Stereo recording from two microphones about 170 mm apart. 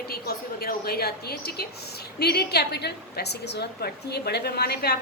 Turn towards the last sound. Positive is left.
turn(degrees=70)  # may be behind; listen again after turning